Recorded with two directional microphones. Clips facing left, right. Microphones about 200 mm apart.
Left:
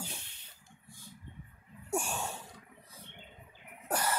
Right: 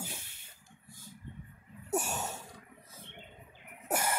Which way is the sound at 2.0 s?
40° right (ahead or behind).